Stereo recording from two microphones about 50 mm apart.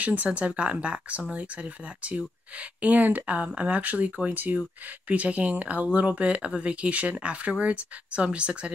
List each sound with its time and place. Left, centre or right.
0.0 s speech: right